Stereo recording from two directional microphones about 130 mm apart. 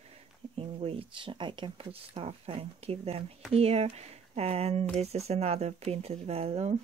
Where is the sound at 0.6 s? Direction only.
45° right (ahead or behind).